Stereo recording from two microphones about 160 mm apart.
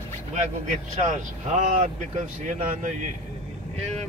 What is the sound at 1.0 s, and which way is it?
Speech, 45° right (ahead or behind).